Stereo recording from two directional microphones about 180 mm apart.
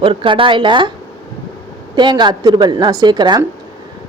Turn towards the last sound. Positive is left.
turn(degrees=-25)  # may be behind; listen again after turning